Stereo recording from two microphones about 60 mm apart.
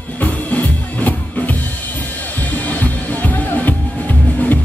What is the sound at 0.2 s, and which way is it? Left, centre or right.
Music, left.